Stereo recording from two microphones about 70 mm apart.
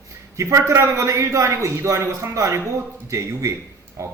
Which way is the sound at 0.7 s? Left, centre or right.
Right.